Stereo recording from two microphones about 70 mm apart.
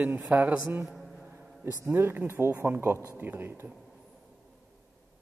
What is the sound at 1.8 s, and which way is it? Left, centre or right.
Speech, right.